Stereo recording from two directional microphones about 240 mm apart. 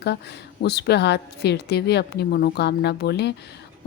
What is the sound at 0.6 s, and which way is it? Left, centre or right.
A woman's voice, left.